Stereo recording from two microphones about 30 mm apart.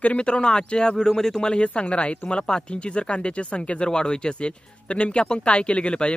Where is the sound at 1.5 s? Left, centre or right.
Left.